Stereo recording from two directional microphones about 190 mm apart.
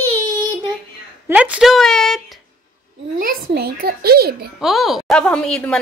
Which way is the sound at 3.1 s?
50° right (ahead or behind).